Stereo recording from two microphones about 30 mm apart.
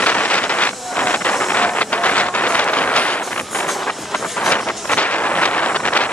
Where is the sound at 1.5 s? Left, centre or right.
Left.